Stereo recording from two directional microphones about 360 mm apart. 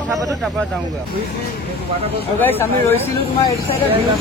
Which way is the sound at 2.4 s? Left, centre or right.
Centre.